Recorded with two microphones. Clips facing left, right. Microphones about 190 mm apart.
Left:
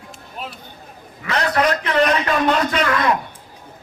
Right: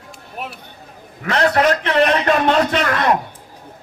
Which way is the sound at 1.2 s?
45° right (ahead or behind).